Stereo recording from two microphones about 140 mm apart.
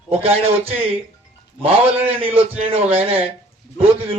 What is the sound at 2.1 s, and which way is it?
A man's voice, 45° right (ahead or behind).